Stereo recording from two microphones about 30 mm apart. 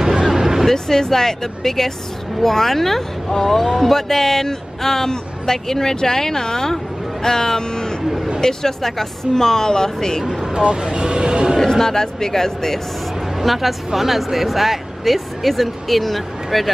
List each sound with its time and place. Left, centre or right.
0.0 s a sound: centre
0.7 s speech: centre
3.5 s speech: centre
3.9 s speech: centre
10.5 s speech: right
11.8 s speech: centre
13.4 s a woman's voice: centre